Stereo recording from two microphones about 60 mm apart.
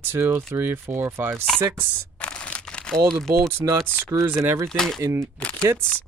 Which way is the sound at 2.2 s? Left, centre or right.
Left.